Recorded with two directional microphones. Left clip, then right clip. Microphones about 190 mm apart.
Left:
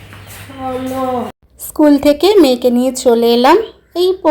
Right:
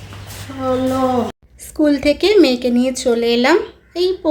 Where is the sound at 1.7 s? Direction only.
25° left (ahead or behind).